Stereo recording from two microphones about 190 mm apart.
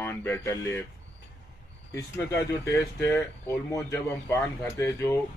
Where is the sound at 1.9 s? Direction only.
15° left (ahead or behind).